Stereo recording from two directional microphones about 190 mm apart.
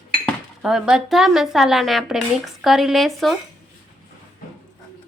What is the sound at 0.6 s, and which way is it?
A woman's voice, centre (ahead or behind).